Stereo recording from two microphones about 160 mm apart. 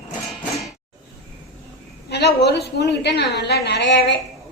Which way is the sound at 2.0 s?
90° left.